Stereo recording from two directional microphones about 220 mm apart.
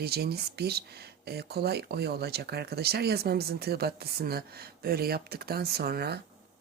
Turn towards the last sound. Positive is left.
turn(degrees=-45)  # may be behind; listen again after turning